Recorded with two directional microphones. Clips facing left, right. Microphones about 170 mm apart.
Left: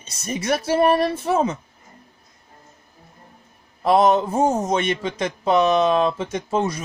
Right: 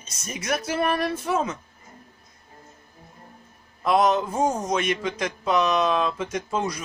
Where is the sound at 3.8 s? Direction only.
30° left (ahead or behind).